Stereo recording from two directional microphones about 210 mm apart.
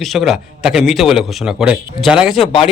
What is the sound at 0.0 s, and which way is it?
A man's voice, centre (ahead or behind).